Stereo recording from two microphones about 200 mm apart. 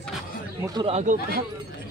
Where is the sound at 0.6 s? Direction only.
25° right (ahead or behind).